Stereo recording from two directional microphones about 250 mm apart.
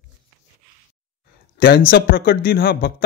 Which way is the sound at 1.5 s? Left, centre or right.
Left.